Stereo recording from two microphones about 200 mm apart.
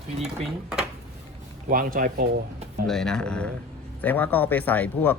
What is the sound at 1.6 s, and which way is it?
Speech, 45° right (ahead or behind).